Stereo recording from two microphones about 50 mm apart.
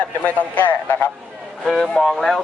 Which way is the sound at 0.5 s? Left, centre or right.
Left.